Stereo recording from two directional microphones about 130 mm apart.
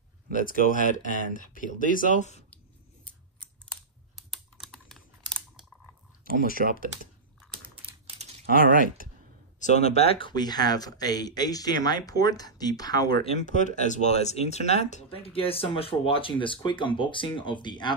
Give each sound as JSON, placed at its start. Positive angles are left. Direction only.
{"t": 0.5, "sound": "speech", "side_deg": 90}
{"t": 3.1, "sound": "scissors", "side_deg": 10}
{"t": 4.1, "sound": "computer keyboard", "side_deg": 0}
{"t": 6.6, "sound": "speech", "side_deg": -90}
{"t": 8.2, "sound": "typing", "side_deg": -90}
{"t": 9.6, "sound": "speech", "side_deg": 65}
{"t": 13.2, "sound": "speech", "side_deg": 50}
{"t": 13.5, "sound": "speech", "side_deg": 70}